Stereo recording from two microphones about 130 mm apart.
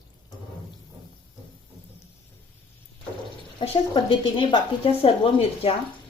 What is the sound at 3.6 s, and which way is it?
A woman's voice, 35° left (ahead or behind).